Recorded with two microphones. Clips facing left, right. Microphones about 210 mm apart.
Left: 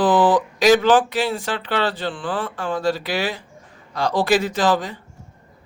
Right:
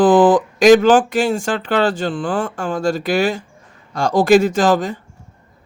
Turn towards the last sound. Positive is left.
turn(degrees=-45)  # may be behind; listen again after turning